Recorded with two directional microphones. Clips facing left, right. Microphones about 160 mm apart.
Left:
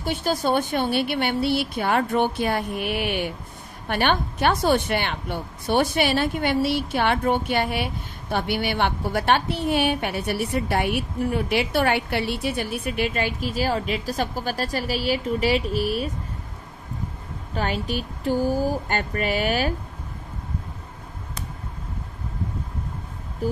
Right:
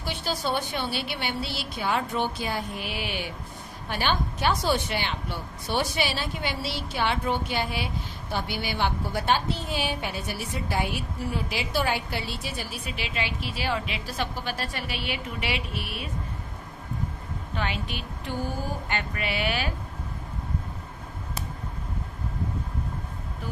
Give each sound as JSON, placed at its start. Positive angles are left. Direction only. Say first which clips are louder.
{"t": 0.0, "sound": "a woman's voice", "louder": "left 6 dB", "side_deg": 50}
{"t": 17.6, "sound": "a woman's voice", "louder": "left 6 dB", "side_deg": 40}